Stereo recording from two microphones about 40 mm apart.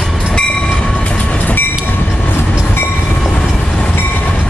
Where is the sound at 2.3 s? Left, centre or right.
Left.